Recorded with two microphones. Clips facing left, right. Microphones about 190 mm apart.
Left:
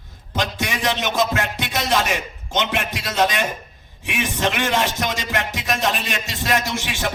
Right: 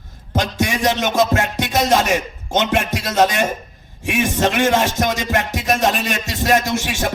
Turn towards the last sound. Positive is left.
turn(degrees=-45)  # may be behind; listen again after turning